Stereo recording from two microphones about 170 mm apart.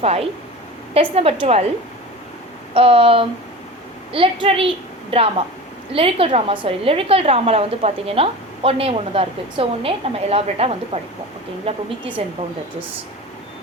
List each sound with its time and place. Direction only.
0.0 s a woman's voice: 35° right (ahead or behind)
2.7 s a woman's voice: 35° right (ahead or behind)